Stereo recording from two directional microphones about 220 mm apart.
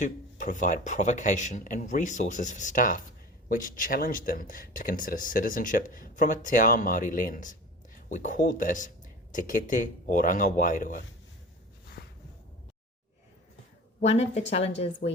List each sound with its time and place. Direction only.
0.0 s speech: 35° left (ahead or behind)
12.0 s a sound: 45° left (ahead or behind)
14.0 s a woman's voice: 30° left (ahead or behind)
15.0 s speech: 40° left (ahead or behind)